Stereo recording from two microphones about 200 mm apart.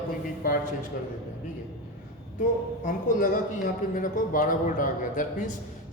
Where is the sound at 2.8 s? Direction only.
40° left (ahead or behind).